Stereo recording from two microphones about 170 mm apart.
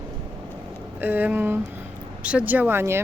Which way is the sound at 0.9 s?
10° right (ahead or behind).